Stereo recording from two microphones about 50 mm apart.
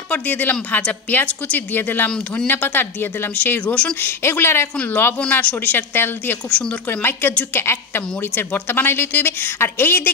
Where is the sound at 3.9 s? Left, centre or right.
Left.